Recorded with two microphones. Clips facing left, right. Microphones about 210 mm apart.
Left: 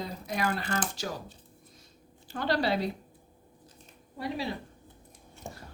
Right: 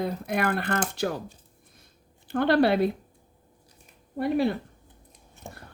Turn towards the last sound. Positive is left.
turn(degrees=-55)  # may be behind; listen again after turning